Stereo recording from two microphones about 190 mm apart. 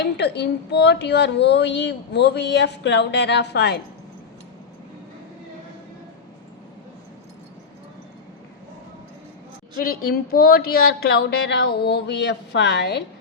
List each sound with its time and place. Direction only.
0.0 s speech: 60° left (ahead or behind)
9.7 s speech: 50° left (ahead or behind)